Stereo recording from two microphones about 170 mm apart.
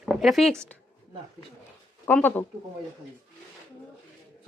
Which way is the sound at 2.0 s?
10° left (ahead or behind).